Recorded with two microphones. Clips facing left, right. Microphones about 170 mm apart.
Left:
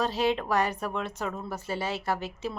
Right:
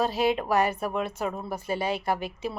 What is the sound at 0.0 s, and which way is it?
A woman's voice, 10° right (ahead or behind).